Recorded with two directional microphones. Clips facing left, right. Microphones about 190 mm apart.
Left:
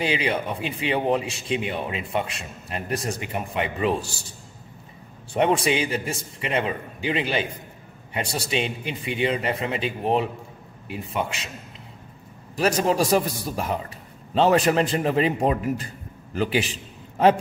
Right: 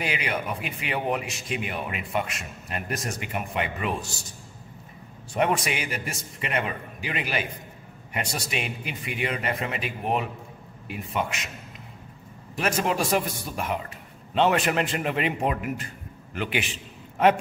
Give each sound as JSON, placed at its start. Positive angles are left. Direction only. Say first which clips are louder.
{"t": 0.0, "sound": "a man's voice", "louder": "left 5 dB", "side_deg": 30}
{"t": 5.3, "sound": "a man's voice", "louder": "left 4 dB", "side_deg": 30}
{"t": 11.2, "sound": "a man's voice", "louder": "left 1 dB", "side_deg": 30}
{"t": 12.5, "sound": "a man's voice", "louder": "left 4 dB", "side_deg": 35}